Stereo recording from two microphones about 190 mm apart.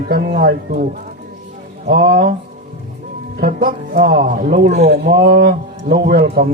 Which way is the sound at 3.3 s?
50° right (ahead or behind).